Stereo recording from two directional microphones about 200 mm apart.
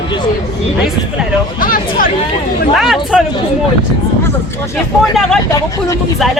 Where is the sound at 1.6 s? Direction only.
45° left (ahead or behind).